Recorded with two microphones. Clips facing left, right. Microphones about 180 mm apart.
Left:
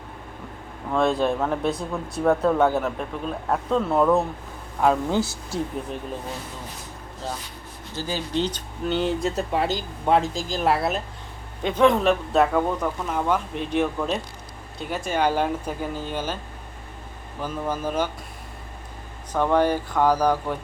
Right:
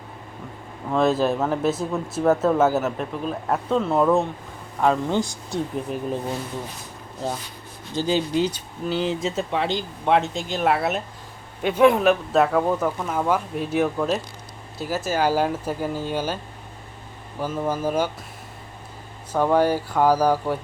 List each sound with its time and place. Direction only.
0.9 s speech: 5° right (ahead or behind)
7.9 s speech: 20° right (ahead or behind)
8.3 s speech: 10° right (ahead or behind)
17.4 s speech: 10° right (ahead or behind)
19.3 s speech: 10° right (ahead or behind)